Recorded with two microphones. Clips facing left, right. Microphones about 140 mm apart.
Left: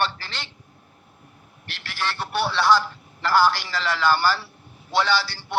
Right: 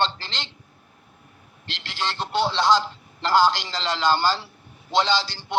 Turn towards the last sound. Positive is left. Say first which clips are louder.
# even
turn(degrees=-20)  # may be behind; listen again after turning